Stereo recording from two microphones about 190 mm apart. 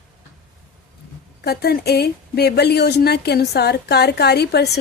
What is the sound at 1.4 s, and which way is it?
Speech, 55° left (ahead or behind).